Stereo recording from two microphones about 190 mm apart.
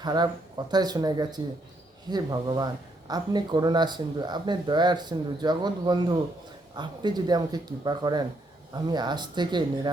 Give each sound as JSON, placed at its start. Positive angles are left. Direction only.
{"t": 0.0, "sound": "speech", "side_deg": -20}